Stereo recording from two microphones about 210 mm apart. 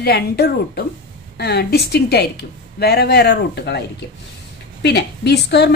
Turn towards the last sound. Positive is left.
turn(degrees=50)  # may be behind; listen again after turning